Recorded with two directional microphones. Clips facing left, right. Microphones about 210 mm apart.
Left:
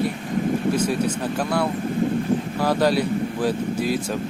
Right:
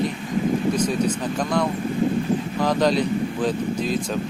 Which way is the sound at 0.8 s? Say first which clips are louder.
Even; 10° left (ahead or behind).